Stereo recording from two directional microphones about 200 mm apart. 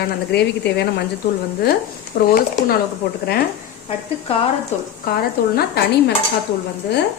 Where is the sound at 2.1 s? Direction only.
50° left (ahead or behind).